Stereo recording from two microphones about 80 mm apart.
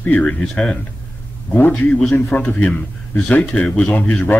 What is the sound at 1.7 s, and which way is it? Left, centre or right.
A man's voice, centre.